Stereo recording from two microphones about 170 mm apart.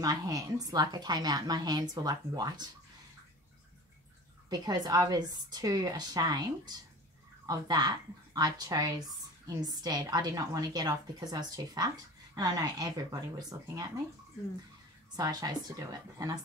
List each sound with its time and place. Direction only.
0.0 s a woman's voice: 20° right (ahead or behind)
4.5 s a woman's voice: 25° right (ahead or behind)
15.1 s a woman's voice: 20° right (ahead or behind)